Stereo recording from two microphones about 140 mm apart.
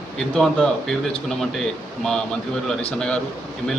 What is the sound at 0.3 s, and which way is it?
Speech, 5° left (ahead or behind).